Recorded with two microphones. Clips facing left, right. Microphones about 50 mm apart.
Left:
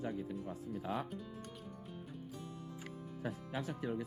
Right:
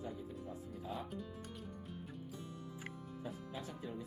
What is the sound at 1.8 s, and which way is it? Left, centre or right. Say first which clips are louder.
Music: even; centre.